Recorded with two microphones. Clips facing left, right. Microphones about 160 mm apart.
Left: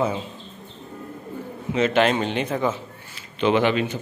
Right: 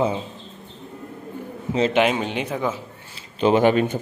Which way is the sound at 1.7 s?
30° right (ahead or behind).